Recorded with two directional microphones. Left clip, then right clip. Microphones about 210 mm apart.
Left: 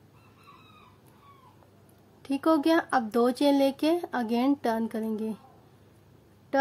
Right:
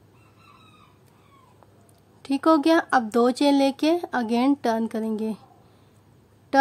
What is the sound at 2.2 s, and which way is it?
Speech, 20° right (ahead or behind).